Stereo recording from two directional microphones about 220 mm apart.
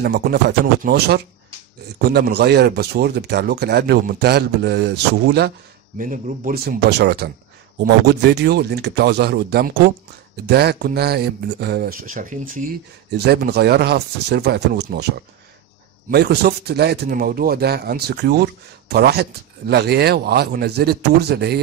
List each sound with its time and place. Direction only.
0.0 s speech: 45° right (ahead or behind)
5.9 s speech: 35° right (ahead or behind)
13.1 s speech: 50° right (ahead or behind)
16.1 s speech: 45° right (ahead or behind)